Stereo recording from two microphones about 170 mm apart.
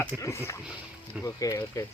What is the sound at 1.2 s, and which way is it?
Speech, 20° left (ahead or behind).